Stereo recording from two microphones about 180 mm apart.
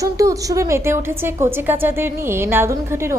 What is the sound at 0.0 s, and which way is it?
Speech, 20° right (ahead or behind).